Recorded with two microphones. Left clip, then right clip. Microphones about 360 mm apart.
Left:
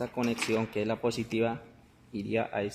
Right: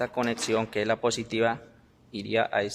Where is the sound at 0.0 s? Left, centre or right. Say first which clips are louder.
Right 4 dB; right.